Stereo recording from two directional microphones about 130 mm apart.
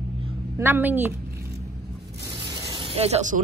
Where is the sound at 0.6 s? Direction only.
15° right (ahead or behind).